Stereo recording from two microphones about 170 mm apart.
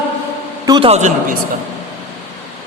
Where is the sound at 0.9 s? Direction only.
45° right (ahead or behind).